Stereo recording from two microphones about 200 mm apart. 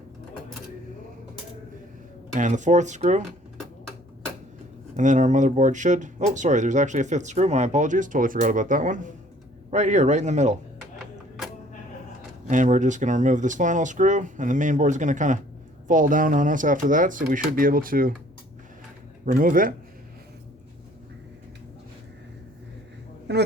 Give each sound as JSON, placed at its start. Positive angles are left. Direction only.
{"t": 2.3, "sound": "speech", "side_deg": -40}
{"t": 4.9, "sound": "speech", "side_deg": -40}
{"t": 12.5, "sound": "speech", "side_deg": -40}
{"t": 19.2, "sound": "speech", "side_deg": -45}
{"t": 23.3, "sound": "a man's voice", "side_deg": -60}